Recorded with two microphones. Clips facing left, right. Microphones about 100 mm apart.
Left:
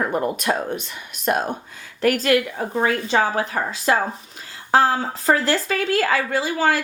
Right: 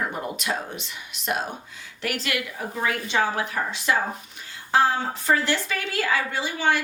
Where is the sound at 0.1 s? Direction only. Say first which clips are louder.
Left 7 dB; 50° left (ahead or behind).